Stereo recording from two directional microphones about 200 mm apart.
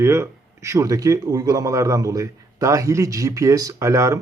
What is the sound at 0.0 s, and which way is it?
Speech, 15° right (ahead or behind).